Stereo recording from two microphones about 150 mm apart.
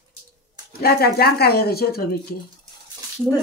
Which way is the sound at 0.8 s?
90° left.